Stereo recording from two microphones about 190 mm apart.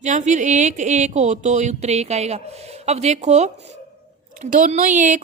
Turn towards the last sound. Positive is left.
turn(degrees=-40)  # may be behind; listen again after turning